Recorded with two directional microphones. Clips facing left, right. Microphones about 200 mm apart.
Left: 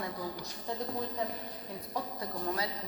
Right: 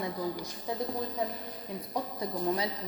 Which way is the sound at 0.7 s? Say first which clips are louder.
Right 3 dB; 10° right (ahead or behind).